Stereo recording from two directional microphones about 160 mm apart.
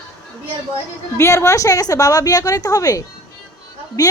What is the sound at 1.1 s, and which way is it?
A woman's voice, 15° left (ahead or behind).